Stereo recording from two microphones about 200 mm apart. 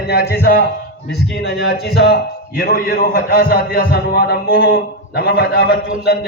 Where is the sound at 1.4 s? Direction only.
55° left (ahead or behind).